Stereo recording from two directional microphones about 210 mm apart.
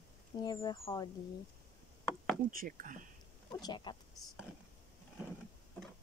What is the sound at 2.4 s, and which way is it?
Speech, 40° right (ahead or behind).